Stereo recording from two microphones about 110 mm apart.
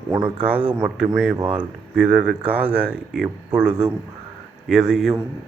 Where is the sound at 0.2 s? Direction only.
15° right (ahead or behind).